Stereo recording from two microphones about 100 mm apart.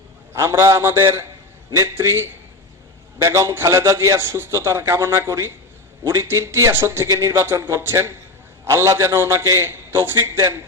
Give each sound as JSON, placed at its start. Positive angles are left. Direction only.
{"t": 0.3, "sound": "a man's voice", "side_deg": -30}